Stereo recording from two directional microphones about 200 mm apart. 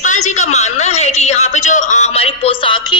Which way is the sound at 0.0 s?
40° left (ahead or behind).